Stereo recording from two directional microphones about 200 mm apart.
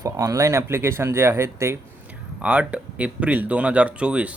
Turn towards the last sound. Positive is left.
turn(degrees=-5)  # may be behind; listen again after turning